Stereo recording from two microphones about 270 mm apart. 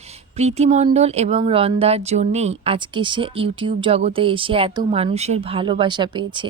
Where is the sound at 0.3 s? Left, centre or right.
Right.